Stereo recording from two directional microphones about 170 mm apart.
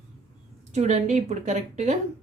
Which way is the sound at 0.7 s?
40° right (ahead or behind).